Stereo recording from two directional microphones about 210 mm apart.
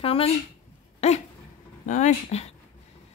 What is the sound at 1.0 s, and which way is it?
Dog, 30° left (ahead or behind).